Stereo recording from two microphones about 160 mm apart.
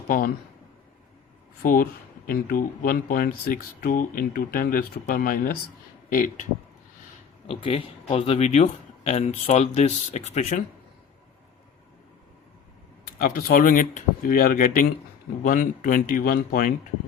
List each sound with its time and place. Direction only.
1.6 s speech: 60° left (ahead or behind)
7.4 s speech: 35° left (ahead or behind)
13.1 s speech: 60° left (ahead or behind)